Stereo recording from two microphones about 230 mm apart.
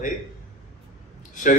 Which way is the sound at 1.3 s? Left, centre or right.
Left.